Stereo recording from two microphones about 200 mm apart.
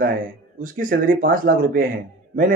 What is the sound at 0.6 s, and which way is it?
Speech, 45° right (ahead or behind).